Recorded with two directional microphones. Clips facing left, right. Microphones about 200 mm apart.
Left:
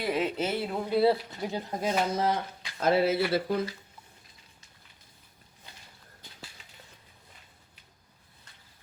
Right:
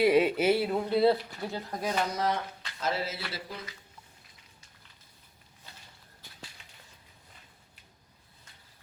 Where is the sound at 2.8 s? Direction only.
60° left (ahead or behind).